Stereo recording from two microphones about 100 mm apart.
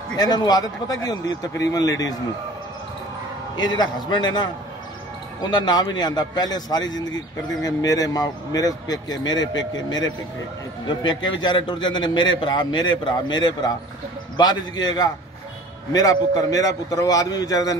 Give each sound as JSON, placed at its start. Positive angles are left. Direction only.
{"t": 0.1, "sound": "a man's voice", "side_deg": 45}
{"t": 3.5, "sound": "a man's voice", "side_deg": 45}